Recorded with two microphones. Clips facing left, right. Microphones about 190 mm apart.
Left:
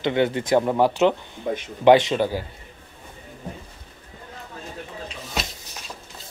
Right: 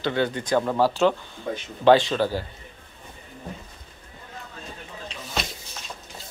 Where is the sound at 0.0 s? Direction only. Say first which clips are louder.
Left 3 dB; 20° left (ahead or behind).